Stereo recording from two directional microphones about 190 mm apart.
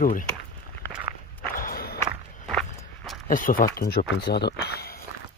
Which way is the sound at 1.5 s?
50° left (ahead or behind).